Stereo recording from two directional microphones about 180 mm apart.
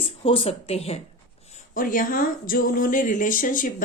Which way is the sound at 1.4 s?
45° left (ahead or behind).